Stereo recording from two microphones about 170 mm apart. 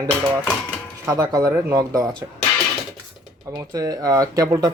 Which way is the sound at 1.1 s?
20° right (ahead or behind).